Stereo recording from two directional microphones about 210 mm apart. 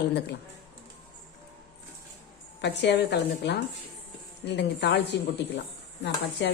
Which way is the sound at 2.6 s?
55° left (ahead or behind).